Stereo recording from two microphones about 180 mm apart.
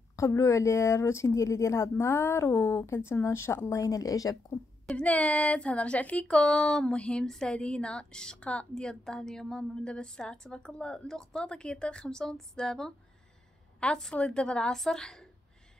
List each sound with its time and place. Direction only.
0.1 s speech: 15° left (ahead or behind)
4.8 s speech: 5° left (ahead or behind)